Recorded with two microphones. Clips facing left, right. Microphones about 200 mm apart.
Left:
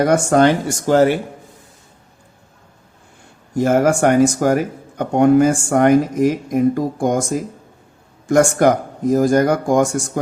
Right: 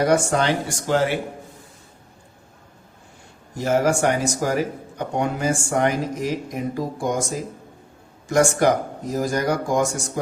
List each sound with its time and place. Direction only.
0.0 s speech: 50° left (ahead or behind)
3.6 s speech: 50° left (ahead or behind)